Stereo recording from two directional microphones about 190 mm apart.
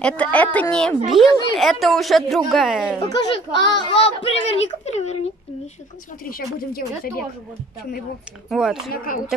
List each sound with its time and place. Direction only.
0.0 s a woman's voice: 5° left (ahead or behind)
3.2 s a child's voice: 25° left (ahead or behind)
6.2 s speech: 50° left (ahead or behind)
8.5 s a woman's voice: 5° right (ahead or behind)
8.9 s speech: 45° left (ahead or behind)